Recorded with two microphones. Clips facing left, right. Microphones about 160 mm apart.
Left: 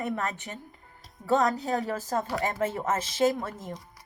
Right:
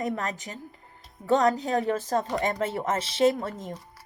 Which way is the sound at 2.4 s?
35° right (ahead or behind).